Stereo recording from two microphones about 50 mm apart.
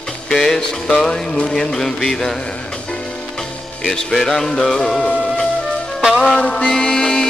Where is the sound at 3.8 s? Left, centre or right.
Centre.